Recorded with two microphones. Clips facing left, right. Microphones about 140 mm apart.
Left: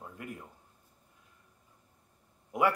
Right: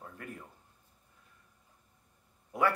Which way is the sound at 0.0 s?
15° left (ahead or behind).